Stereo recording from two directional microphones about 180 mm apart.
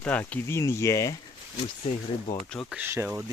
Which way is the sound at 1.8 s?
35° left (ahead or behind).